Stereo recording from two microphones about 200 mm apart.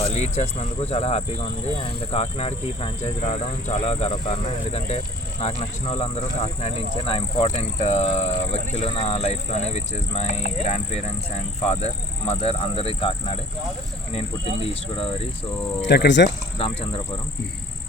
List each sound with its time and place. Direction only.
0.0 s speech: 35° left (ahead or behind)
15.9 s speech: 60° left (ahead or behind)
16.6 s speech: 25° left (ahead or behind)